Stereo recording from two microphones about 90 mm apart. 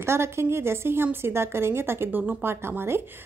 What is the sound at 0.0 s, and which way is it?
Speech, 30° right (ahead or behind).